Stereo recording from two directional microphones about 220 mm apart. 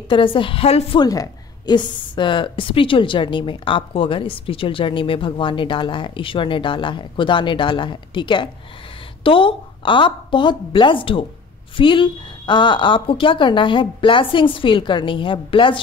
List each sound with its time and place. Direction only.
0.1 s a woman's voice: 25° left (ahead or behind)
1.0 s a woman's voice: 15° left (ahead or behind)